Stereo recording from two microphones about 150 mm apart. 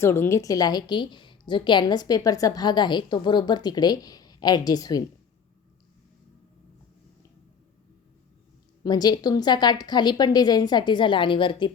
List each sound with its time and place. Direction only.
0.0 s a woman's voice: 15° left (ahead or behind)
8.8 s a woman's voice: 25° left (ahead or behind)